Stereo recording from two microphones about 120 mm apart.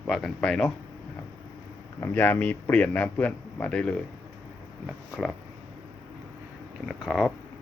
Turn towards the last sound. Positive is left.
turn(degrees=-5)  # may be behind; listen again after turning